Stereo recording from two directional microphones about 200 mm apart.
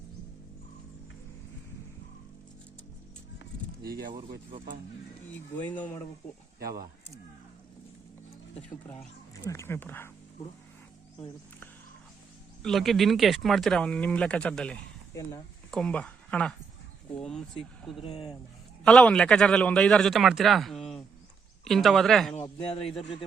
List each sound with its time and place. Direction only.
3.8 s speech: 50° right (ahead or behind)
5.5 s speech: 5° left (ahead or behind)
8.9 s speech: 15° left (ahead or behind)
12.6 s speech: centre (ahead or behind)
15.1 s speech: 15° left (ahead or behind)
15.7 s speech: 5° left (ahead or behind)
18.0 s a man's voice: 30° left (ahead or behind)
18.9 s speech: 5° left (ahead or behind)
22.4 s a man's voice: 30° left (ahead or behind)